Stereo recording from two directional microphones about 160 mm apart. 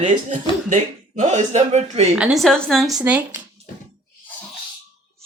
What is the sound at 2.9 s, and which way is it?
Speech, 10° right (ahead or behind).